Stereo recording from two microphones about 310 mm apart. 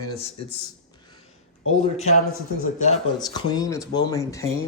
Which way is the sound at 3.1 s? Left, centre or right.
Centre.